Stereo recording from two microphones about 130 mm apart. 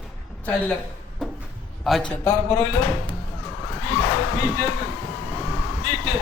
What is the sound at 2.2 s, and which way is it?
Speech, 20° left (ahead or behind).